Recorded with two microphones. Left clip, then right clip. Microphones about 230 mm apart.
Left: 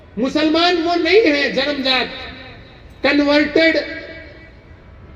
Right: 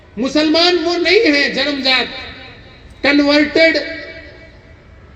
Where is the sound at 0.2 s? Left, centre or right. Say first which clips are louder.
Right 2 dB; right.